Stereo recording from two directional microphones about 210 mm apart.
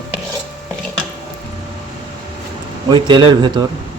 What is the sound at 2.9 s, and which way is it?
Speech, 20° right (ahead or behind).